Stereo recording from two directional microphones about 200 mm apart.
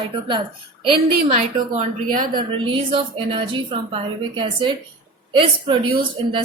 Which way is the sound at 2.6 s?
25° right (ahead or behind).